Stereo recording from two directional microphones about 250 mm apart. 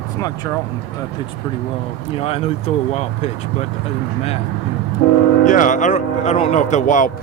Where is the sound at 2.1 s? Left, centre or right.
Left.